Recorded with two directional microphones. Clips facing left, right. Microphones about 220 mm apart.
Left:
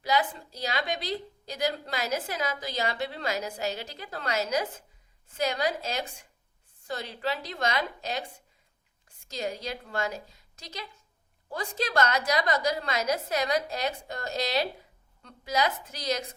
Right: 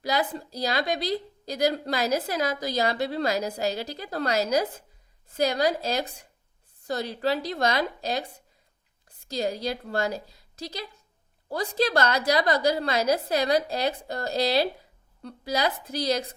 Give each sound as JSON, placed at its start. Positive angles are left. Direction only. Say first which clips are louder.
{"t": 0.0, "sound": "a woman's voice", "louder": "right 1 dB", "side_deg": -40}